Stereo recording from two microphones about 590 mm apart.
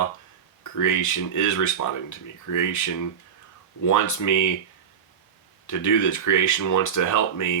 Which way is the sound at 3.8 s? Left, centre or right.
Left.